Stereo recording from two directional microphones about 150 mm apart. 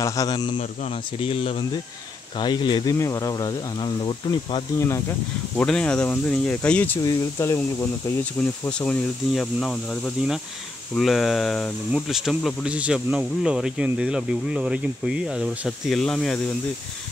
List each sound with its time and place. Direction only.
0.0 s speech: 25° left (ahead or behind)
1.2 s speech: 40° left (ahead or behind)
4.7 s speech: 20° left (ahead or behind)
5.6 s speech: 5° left (ahead or behind)
7.0 s speech: 20° left (ahead or behind)
8.6 s speech: 5° left (ahead or behind)